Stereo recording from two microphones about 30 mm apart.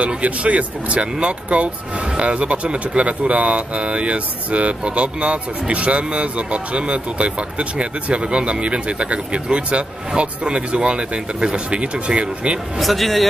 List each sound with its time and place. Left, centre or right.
0.2 s speech: right
12.8 s speech: centre